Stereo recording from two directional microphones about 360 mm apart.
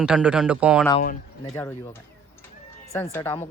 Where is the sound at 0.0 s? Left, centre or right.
Centre.